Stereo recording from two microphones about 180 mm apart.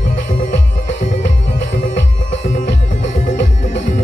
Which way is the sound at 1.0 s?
40° left (ahead or behind).